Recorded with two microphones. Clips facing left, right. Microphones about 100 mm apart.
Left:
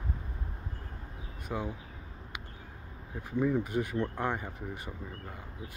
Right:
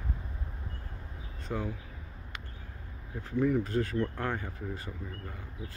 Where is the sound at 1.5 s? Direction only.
20° left (ahead or behind).